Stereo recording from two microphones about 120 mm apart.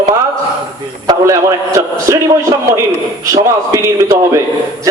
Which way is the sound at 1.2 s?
25° right (ahead or behind).